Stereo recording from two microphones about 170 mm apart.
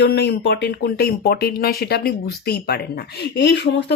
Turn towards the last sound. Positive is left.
turn(degrees=90)